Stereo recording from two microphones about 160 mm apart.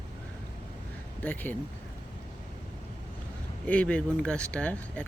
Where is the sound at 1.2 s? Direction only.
10° left (ahead or behind).